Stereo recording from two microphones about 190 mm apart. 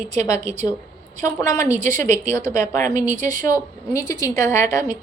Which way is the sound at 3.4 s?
15° left (ahead or behind).